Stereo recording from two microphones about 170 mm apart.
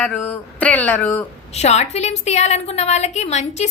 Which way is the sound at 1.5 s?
40° left (ahead or behind).